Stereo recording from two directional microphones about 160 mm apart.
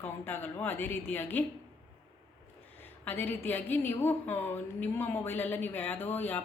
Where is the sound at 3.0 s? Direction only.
10° left (ahead or behind).